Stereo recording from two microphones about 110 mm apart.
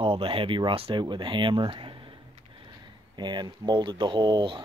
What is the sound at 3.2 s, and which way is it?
Speech, 40° right (ahead or behind).